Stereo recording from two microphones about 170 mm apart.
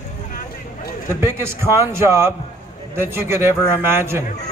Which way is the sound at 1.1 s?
15° right (ahead or behind).